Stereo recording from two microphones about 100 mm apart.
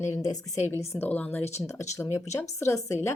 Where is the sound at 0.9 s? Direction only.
15° left (ahead or behind).